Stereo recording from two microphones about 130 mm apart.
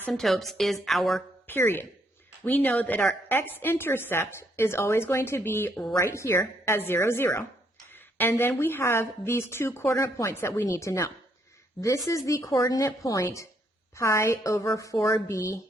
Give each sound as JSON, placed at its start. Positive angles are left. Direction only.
{"t": 0.1, "sound": "a woman's voice", "side_deg": 0}
{"t": 1.5, "sound": "a woman's voice", "side_deg": 15}